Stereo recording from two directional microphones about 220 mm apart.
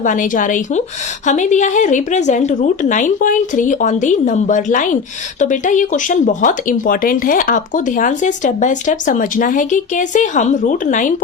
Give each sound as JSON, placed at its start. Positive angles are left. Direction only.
{"t": 0.0, "sound": "speech", "side_deg": 35}